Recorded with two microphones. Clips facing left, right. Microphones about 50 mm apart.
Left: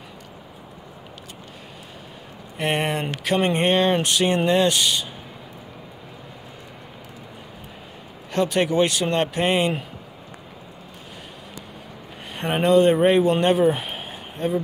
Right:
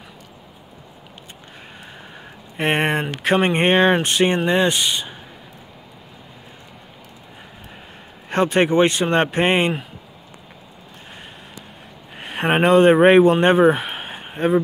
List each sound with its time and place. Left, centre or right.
2.5 s speech: right
4.5 s speech: right
8.3 s speech: right
12.2 s a man's voice: right
13.3 s speech: right
13.9 s a sound: right